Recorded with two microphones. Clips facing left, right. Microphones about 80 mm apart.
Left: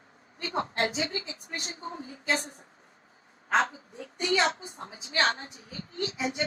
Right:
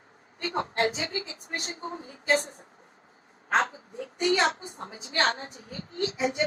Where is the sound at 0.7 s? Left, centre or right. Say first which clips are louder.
Right 2 dB; right.